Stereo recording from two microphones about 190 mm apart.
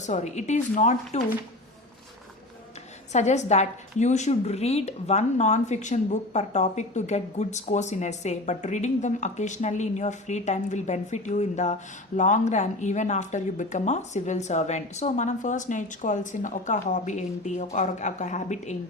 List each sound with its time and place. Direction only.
0.0 s a woman's voice: 40° left (ahead or behind)
3.1 s a woman's voice: 35° left (ahead or behind)